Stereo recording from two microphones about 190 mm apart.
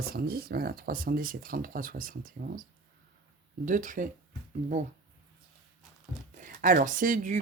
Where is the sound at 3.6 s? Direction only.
45° right (ahead or behind).